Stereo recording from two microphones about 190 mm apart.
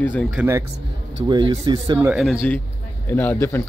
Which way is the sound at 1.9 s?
10° right (ahead or behind).